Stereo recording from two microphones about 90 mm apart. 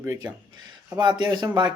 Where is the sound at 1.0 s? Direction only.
55° right (ahead or behind).